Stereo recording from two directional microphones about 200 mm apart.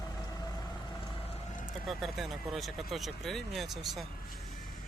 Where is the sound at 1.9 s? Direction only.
Centre (ahead or behind).